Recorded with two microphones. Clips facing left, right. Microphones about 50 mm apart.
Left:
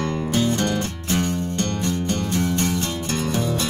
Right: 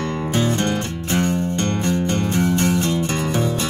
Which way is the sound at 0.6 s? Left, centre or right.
Right.